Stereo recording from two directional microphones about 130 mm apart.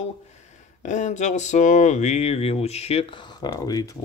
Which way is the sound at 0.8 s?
65° left (ahead or behind).